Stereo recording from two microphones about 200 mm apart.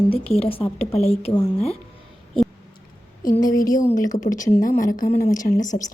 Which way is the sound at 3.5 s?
15° left (ahead or behind).